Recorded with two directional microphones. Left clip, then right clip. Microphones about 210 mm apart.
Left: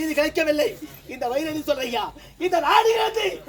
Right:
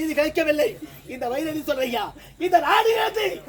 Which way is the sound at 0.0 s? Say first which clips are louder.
Even; 15° left (ahead or behind).